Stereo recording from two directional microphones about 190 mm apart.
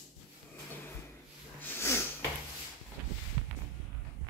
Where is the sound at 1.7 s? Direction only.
15° left (ahead or behind).